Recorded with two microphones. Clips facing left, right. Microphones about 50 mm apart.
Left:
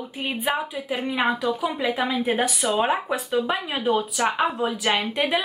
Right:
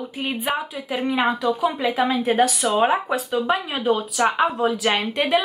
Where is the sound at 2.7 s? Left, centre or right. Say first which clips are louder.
Right 5 dB; centre.